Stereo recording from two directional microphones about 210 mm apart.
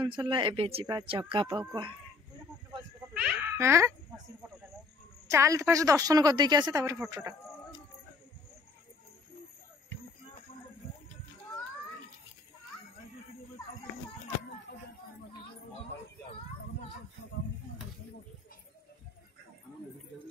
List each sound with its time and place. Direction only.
0.0 s speech: 20° right (ahead or behind)
3.2 s a child's voice: 5° right (ahead or behind)
5.3 s a woman's voice: 15° right (ahead or behind)